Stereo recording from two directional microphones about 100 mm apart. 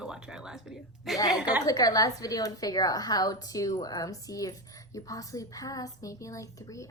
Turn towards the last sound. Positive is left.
turn(degrees=30)  # may be behind; listen again after turning